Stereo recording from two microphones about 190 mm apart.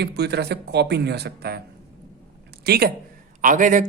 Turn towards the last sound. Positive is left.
turn(degrees=-45)  # may be behind; listen again after turning